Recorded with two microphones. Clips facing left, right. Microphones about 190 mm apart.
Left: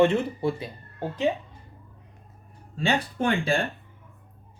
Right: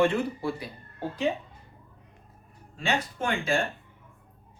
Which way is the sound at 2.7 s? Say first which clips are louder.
Left 3 dB; 35° left (ahead or behind).